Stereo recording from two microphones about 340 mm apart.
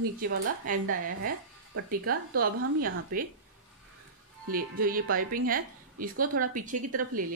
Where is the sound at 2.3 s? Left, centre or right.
Right.